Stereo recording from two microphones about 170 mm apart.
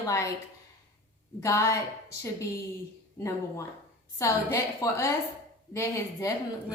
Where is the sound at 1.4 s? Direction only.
15° left (ahead or behind).